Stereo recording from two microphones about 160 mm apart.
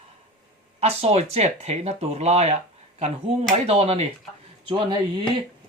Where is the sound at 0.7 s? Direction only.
40° right (ahead or behind).